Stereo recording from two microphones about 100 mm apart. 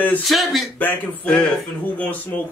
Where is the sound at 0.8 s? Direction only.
15° left (ahead or behind).